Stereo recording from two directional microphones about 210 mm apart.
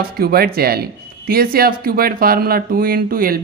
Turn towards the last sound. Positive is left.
turn(degrees=-45)  # may be behind; listen again after turning